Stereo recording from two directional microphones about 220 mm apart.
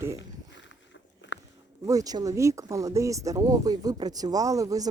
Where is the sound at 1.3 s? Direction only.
55° left (ahead or behind).